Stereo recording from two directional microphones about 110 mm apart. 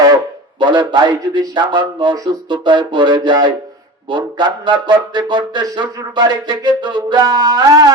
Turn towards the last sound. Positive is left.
turn(degrees=-35)  # may be behind; listen again after turning